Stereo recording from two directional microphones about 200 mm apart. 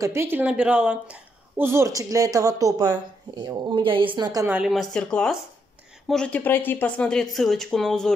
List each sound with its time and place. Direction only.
0.0 s a woman's voice: 15° right (ahead or behind)
4.6 s speech: centre (ahead or behind)